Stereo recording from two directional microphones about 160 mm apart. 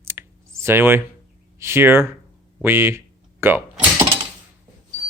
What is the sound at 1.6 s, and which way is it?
Speech, 15° right (ahead or behind).